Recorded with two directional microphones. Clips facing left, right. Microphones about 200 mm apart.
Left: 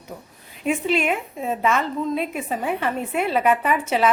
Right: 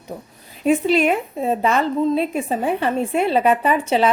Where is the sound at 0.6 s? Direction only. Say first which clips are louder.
Right 5 dB; 35° right (ahead or behind).